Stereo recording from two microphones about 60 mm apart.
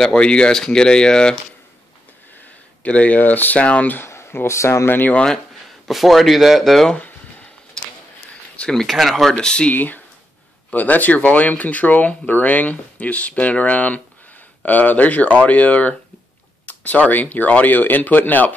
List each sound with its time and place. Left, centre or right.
0.0 s speech: centre
2.8 s speech: left
4.1 s speech: left
4.8 s speech: left
5.1 s speech: centre
5.9 s speech: centre
8.5 s speech: centre
8.8 s speech: centre
9.4 s speech: centre
9.7 s speech: left